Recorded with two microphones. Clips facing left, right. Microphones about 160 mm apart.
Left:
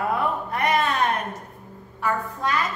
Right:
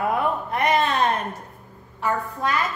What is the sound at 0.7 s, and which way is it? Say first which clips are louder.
Speech: right 1 dB; 25° right (ahead or behind).